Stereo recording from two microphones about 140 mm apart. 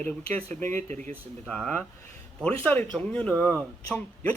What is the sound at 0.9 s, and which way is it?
Speech, 65° right (ahead or behind).